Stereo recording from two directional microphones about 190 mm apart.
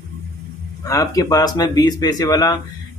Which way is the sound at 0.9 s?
20° left (ahead or behind).